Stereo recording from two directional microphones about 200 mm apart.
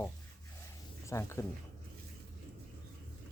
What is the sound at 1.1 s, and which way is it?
Speech, 15° left (ahead or behind).